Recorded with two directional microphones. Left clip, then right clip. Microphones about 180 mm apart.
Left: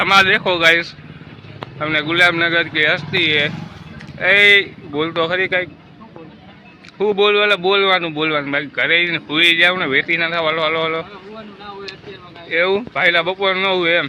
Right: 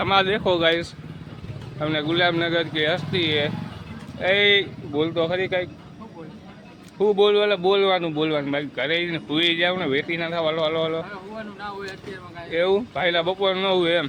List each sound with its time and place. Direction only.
0.0 s speech: 15° right (ahead or behind)
7.0 s speech: 10° right (ahead or behind)
12.5 s speech: 10° right (ahead or behind)